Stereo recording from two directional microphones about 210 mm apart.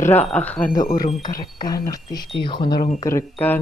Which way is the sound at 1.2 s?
20° left (ahead or behind).